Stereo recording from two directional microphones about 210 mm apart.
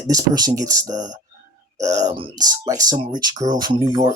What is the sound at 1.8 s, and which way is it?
Speech, 35° right (ahead or behind).